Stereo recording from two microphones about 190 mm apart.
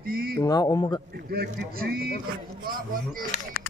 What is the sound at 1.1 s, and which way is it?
Speech, 60° right (ahead or behind).